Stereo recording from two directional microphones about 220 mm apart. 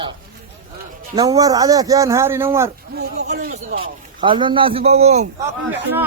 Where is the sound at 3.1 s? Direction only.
35° right (ahead or behind).